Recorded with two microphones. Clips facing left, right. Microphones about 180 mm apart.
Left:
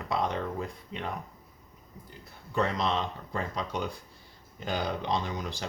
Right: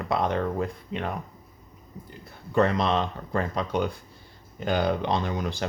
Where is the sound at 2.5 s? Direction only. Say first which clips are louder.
Right 6 dB; 60° right (ahead or behind).